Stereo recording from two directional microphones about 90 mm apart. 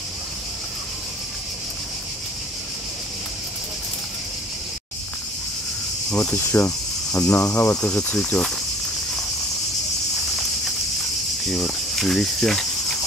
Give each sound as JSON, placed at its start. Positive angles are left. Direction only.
{"t": 6.0, "sound": "cricket", "side_deg": 5}
{"t": 6.3, "sound": "cricket", "side_deg": 30}
{"t": 7.7, "sound": "speech", "side_deg": 10}
{"t": 11.4, "sound": "cricket", "side_deg": 0}